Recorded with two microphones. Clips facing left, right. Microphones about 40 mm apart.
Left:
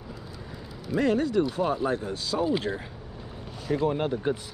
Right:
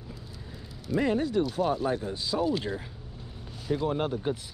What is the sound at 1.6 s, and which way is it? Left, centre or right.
Speech, left.